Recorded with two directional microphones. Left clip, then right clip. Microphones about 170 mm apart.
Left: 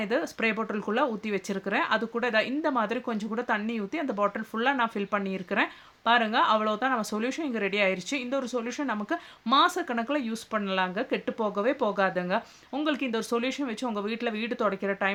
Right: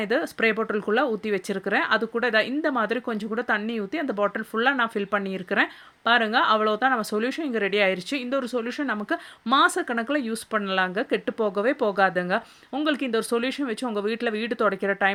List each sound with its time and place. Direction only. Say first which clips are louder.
0.0 s speech: right 4 dB; 25° right (ahead or behind)